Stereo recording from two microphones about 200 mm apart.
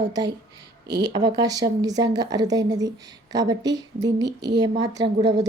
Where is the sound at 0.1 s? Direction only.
20° right (ahead or behind).